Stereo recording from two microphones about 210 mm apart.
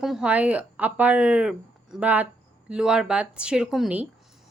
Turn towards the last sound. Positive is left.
turn(degrees=-5)  # may be behind; listen again after turning